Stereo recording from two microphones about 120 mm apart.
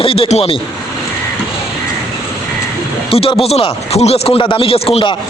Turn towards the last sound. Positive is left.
turn(degrees=50)  # may be behind; listen again after turning